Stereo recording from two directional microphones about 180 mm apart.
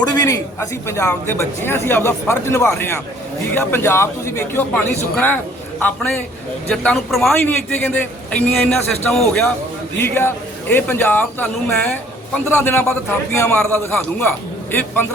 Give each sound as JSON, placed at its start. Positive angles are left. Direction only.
{"t": 0.0, "sound": "a man's voice", "side_deg": 20}